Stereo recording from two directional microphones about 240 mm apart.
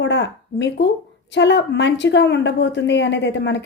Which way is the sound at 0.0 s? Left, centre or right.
Left.